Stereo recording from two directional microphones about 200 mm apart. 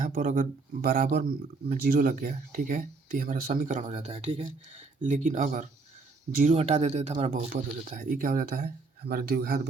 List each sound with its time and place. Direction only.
0.0 s speech: 40° right (ahead or behind)